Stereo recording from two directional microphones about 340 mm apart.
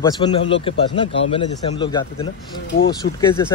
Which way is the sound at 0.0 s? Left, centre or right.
Centre.